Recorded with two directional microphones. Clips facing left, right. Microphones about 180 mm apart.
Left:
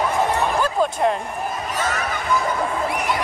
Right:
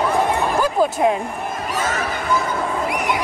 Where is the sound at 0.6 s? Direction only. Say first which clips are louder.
Right 2 dB; 10° right (ahead or behind).